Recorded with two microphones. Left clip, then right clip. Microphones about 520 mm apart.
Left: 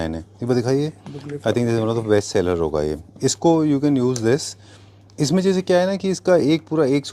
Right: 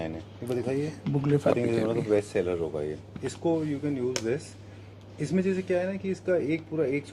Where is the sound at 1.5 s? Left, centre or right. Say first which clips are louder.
Left 6 dB; left.